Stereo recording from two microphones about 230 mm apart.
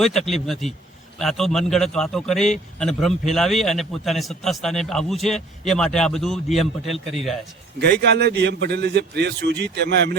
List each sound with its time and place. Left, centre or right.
0.0 s a man's voice: centre
8.0 s a man's voice: right